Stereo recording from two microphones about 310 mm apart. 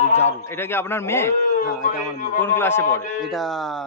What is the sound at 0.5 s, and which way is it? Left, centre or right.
Speech, centre.